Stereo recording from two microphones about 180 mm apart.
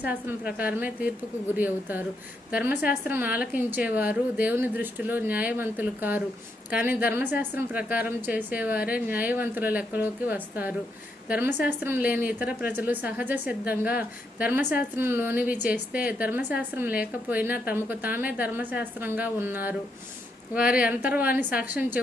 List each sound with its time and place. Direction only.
0.0 s speech: 10° right (ahead or behind)
20.7 s speech: 5° right (ahead or behind)